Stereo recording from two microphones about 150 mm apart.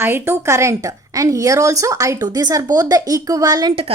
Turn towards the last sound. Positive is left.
turn(degrees=-25)  # may be behind; listen again after turning